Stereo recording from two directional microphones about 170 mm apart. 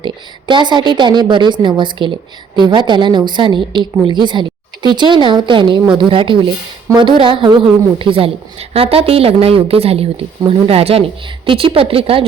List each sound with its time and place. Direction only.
0.0 s a woman's voice: 30° right (ahead or behind)